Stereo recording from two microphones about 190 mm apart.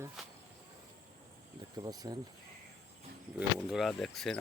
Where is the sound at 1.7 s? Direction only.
20° right (ahead or behind).